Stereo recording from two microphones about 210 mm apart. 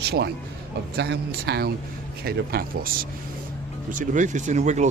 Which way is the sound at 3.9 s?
35° right (ahead or behind).